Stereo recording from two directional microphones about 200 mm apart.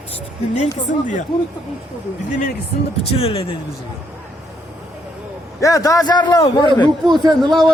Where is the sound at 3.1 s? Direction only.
30° left (ahead or behind).